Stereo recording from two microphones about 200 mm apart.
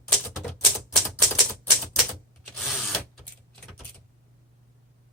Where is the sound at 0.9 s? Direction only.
Centre (ahead or behind).